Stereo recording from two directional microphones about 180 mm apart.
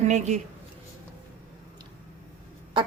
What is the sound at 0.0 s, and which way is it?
Speech, 40° right (ahead or behind).